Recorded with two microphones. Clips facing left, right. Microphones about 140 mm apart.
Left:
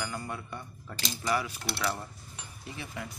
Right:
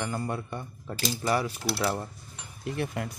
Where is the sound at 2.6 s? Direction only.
60° right (ahead or behind).